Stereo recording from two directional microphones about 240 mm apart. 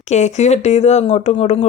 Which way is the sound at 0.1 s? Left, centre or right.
Left.